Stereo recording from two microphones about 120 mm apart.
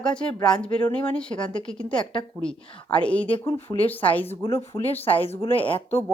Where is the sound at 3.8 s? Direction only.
15° left (ahead or behind).